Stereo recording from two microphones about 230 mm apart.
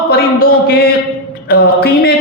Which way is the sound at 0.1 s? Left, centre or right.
Left.